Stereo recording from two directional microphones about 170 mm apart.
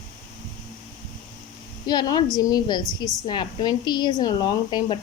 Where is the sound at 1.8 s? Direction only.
25° left (ahead or behind).